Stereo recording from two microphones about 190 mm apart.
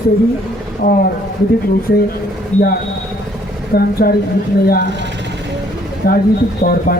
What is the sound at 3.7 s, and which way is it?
Speech, 50° left (ahead or behind).